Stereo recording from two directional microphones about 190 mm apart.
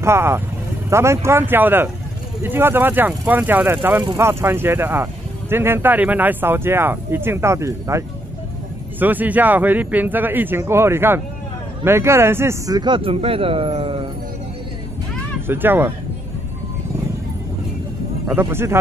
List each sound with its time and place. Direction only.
0.0 s speech: 15° right (ahead or behind)
9.0 s a man's voice: 10° right (ahead or behind); by 14.0 s 30° right (ahead or behind)
15.4 s speech: 10° right (ahead or behind)
18.2 s speech: 10° right (ahead or behind)